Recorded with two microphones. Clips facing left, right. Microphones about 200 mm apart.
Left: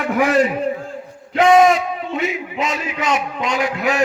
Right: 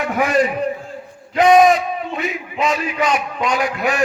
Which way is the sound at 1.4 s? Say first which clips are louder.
Right 1 dB; 25° left (ahead or behind).